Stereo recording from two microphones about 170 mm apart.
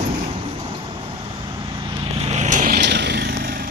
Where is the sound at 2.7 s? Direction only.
85° right; by 3.7 s 60° right (ahead or behind).